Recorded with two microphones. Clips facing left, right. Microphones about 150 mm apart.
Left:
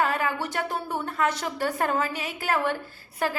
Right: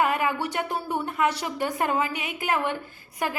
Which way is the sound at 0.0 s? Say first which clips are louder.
Right 2 dB; 15° right (ahead or behind).